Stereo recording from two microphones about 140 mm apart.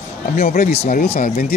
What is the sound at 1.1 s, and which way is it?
Speech, 60° left (ahead or behind).